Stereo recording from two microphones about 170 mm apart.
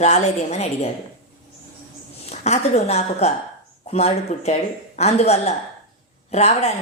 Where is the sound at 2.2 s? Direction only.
40° left (ahead or behind).